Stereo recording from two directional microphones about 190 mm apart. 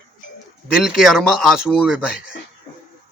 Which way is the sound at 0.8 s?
Centre (ahead or behind).